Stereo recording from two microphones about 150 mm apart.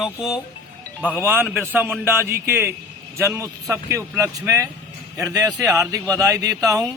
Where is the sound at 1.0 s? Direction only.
15° right (ahead or behind).